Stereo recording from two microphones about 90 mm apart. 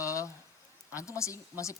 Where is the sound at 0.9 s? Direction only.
35° left (ahead or behind).